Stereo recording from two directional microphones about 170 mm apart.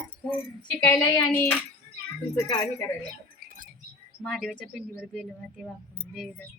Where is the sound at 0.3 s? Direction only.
10° left (ahead or behind).